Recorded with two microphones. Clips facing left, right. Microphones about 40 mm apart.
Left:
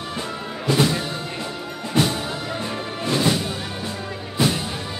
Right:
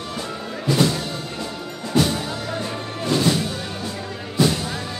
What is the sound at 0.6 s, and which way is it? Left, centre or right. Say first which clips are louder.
Music: even; centre.